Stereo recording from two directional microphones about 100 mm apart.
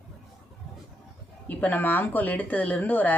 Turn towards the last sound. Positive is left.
turn(degrees=15)  # may be behind; listen again after turning